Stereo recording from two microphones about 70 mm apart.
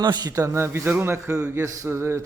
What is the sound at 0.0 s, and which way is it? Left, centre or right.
Speech, right.